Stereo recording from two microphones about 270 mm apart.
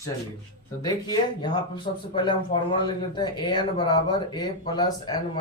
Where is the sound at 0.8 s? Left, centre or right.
Centre.